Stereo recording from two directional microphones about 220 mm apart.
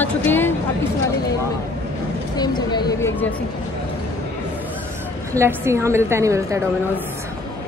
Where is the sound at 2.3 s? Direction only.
20° left (ahead or behind).